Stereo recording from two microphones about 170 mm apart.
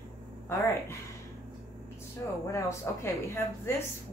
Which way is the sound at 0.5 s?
15° left (ahead or behind).